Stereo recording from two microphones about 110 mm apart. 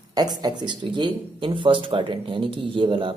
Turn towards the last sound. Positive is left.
turn(degrees=-50)  # may be behind; listen again after turning